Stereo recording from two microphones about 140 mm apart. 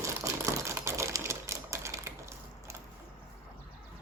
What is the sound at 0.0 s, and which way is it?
Typewriter, 20° right (ahead or behind).